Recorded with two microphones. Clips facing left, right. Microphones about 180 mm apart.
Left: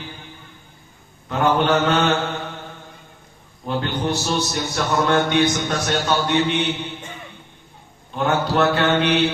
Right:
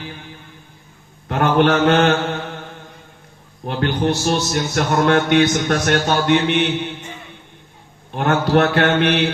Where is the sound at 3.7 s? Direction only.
65° right (ahead or behind).